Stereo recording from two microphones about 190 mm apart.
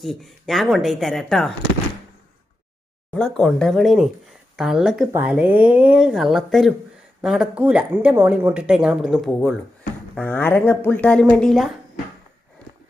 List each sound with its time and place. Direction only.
0.0 s speech: centre (ahead or behind)
3.2 s speech: 5° left (ahead or behind)